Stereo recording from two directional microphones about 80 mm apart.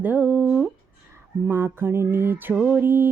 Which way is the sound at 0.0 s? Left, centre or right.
Right.